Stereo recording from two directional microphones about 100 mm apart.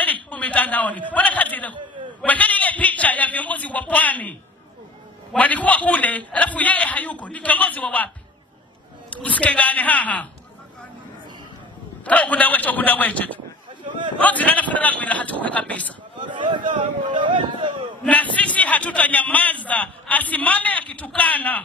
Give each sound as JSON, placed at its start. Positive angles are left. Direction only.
{"t": 0.0, "sound": "a man's voice", "side_deg": 15}
{"t": 9.1, "sound": "a man's voice", "side_deg": 15}
{"t": 12.0, "sound": "a man's voice", "side_deg": 15}
{"t": 16.2, "sound": "speech", "side_deg": -55}
{"t": 18.0, "sound": "a man's voice", "side_deg": 15}